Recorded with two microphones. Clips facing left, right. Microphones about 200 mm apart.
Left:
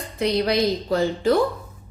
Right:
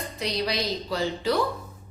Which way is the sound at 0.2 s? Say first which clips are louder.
Left 8 dB; 55° left (ahead or behind).